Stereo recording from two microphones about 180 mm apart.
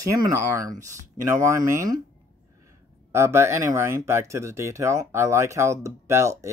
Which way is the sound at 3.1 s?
15° right (ahead or behind).